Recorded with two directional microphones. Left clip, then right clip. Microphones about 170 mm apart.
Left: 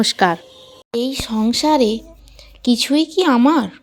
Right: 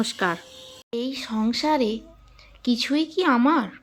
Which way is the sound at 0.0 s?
35° left (ahead or behind).